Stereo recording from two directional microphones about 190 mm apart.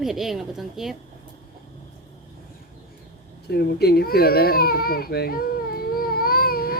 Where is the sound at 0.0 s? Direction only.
Centre (ahead or behind).